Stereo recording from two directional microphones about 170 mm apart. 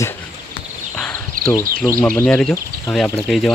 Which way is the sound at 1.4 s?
55° right (ahead or behind).